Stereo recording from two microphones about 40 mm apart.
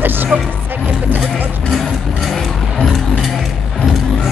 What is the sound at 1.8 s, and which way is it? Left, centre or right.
Music, centre.